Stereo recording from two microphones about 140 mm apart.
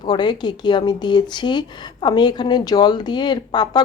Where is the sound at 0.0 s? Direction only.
30° left (ahead or behind).